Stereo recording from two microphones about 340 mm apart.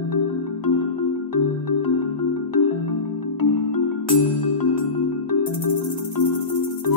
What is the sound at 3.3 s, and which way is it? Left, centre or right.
Music, left.